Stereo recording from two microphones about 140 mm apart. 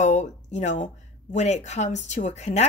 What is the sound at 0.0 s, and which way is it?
Speech, 60° left (ahead or behind).